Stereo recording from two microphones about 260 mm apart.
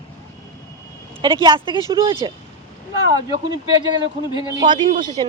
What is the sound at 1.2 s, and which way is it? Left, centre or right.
Speech, centre.